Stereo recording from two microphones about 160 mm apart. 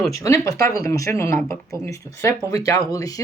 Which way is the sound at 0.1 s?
20° left (ahead or behind).